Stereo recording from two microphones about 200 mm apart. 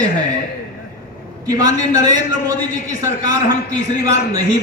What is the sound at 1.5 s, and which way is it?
A man's voice, 15° right (ahead or behind).